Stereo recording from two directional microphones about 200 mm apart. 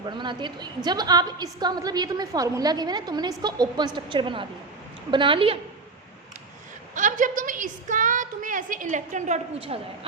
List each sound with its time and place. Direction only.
0.0 s a woman's voice: 25° right (ahead or behind)
6.9 s a woman's voice: 40° right (ahead or behind)